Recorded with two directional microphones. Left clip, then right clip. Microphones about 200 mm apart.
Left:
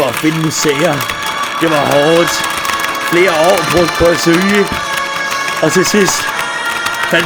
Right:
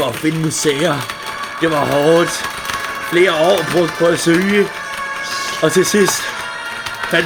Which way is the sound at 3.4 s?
45° left (ahead or behind).